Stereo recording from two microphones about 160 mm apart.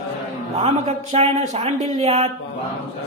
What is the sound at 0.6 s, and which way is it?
Speech, 40° right (ahead or behind).